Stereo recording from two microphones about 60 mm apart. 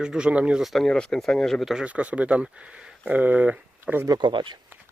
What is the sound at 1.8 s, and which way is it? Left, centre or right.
Speech, right.